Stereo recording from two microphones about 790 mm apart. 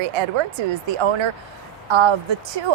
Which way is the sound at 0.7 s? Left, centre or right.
Right.